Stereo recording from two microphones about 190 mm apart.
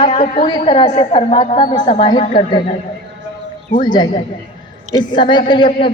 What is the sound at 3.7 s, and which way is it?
A woman's voice, 25° left (ahead or behind).